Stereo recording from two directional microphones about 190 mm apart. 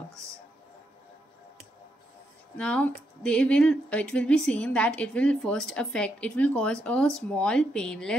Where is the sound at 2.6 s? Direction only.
5° left (ahead or behind).